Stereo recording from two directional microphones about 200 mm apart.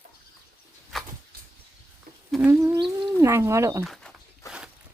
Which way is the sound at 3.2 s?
15° right (ahead or behind).